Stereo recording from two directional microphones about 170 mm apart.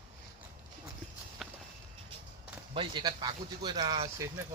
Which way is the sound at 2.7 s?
30° right (ahead or behind).